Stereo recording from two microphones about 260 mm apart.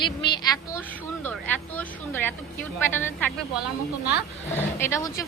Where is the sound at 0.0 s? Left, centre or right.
Centre.